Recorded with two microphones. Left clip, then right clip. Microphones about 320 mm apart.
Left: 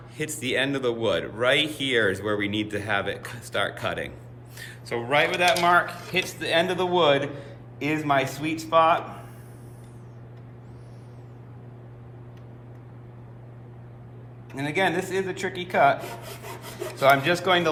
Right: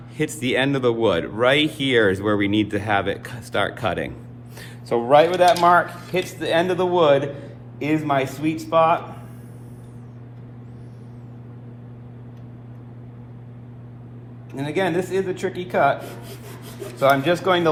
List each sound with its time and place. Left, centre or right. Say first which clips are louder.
0.2 s a man's voice: right 5 dB; centre
14.5 s speech: right 2 dB; centre